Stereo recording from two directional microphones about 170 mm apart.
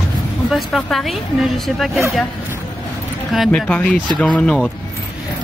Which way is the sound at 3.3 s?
Centre (ahead or behind).